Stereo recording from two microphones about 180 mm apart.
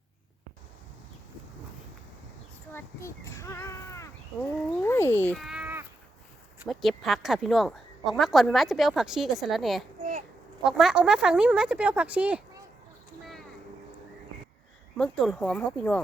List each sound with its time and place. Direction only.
2.7 s speech: 15° left (ahead or behind)
5.4 s a sound: 5° right (ahead or behind)
6.7 s a woman's voice: centre (ahead or behind)
10.0 s a sound: 45° right (ahead or behind)
10.6 s a woman's voice: 5° right (ahead or behind)
14.9 s a woman's voice: 5° left (ahead or behind)